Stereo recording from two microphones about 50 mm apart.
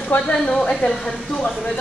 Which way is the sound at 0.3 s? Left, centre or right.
Centre.